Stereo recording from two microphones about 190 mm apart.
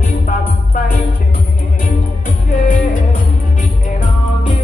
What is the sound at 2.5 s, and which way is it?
Music, 45° left (ahead or behind).